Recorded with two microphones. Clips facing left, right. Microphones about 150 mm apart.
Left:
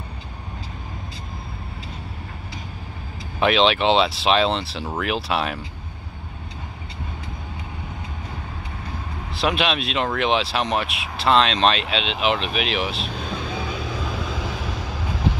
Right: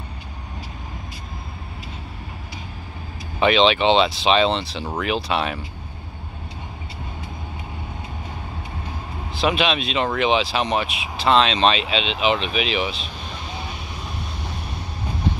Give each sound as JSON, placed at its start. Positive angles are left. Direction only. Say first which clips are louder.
{"t": 3.3, "sound": "speech", "louder": "right 1 dB", "side_deg": 0}
{"t": 9.3, "sound": "speech", "louder": "right 1 dB", "side_deg": 0}
{"t": 14.3, "sound": "vehicle", "louder": "left 4 dB", "side_deg": 90}